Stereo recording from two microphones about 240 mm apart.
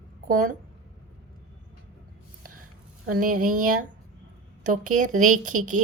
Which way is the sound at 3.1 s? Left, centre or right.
Right.